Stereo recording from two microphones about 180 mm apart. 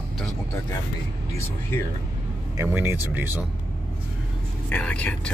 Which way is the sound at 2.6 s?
10° right (ahead or behind).